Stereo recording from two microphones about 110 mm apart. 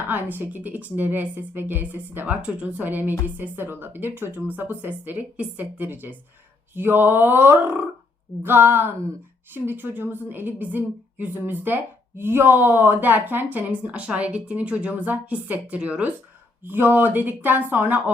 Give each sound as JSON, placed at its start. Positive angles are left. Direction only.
{"t": 0.1, "sound": "a woman's voice", "side_deg": -20}
{"t": 6.7, "sound": "a sound", "side_deg": -20}
{"t": 9.5, "sound": "a woman's voice", "side_deg": -20}